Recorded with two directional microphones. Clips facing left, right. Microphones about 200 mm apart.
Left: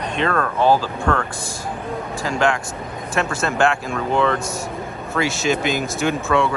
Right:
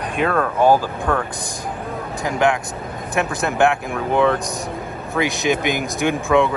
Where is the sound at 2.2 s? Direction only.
20° right (ahead or behind).